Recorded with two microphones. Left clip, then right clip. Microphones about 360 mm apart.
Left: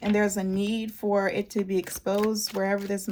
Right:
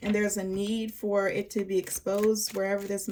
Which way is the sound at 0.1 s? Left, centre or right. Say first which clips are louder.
Left 3 dB; centre.